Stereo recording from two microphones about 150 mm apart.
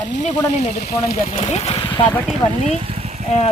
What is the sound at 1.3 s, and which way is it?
Speech, 45° left (ahead or behind).